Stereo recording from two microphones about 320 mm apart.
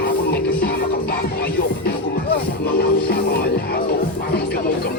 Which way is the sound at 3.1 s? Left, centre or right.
Left.